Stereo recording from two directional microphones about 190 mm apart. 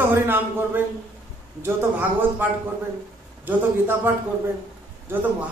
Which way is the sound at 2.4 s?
10° right (ahead or behind).